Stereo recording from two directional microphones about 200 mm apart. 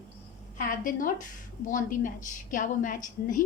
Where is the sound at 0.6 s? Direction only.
45° left (ahead or behind).